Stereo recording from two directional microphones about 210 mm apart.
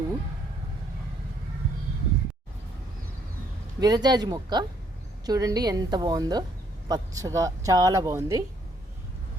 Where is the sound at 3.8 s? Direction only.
20° right (ahead or behind).